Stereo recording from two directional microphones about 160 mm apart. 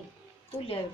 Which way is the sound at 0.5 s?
35° left (ahead or behind).